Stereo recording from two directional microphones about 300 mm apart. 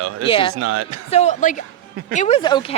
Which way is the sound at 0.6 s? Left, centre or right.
Right.